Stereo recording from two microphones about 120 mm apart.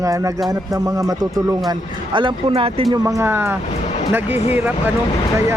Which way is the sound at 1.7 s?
40° right (ahead or behind).